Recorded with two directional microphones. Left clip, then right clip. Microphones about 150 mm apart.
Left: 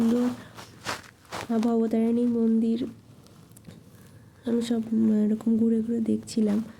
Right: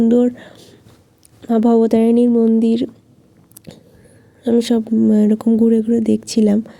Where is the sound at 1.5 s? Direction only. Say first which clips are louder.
Right 12 dB; 35° right (ahead or behind).